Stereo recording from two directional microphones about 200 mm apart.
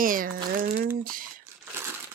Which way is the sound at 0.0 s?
45° right (ahead or behind).